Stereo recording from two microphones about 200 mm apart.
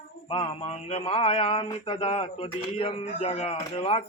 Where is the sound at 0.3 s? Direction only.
25° left (ahead or behind).